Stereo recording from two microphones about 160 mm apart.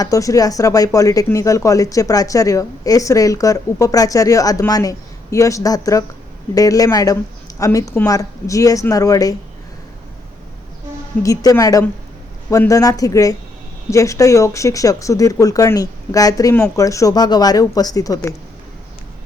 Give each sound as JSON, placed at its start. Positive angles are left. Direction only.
{"t": 0.0, "sound": "speech", "side_deg": 20}
{"t": 11.2, "sound": "speech", "side_deg": 20}